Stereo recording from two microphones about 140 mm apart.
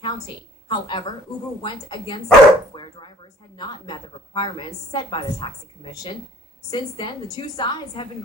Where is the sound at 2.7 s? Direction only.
35° left (ahead or behind).